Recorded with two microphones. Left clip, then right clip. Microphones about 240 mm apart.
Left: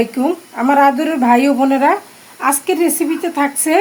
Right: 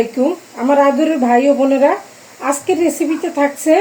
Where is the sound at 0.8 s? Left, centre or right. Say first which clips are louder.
Even; left.